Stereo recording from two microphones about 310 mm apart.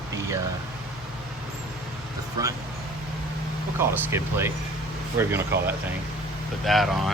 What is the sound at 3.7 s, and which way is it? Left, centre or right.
Speech, centre.